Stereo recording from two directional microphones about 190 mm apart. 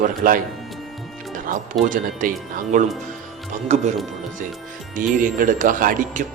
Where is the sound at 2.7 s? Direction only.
40° right (ahead or behind).